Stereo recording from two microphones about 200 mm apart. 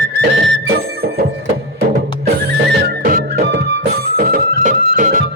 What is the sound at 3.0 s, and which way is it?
Music, 45° right (ahead or behind).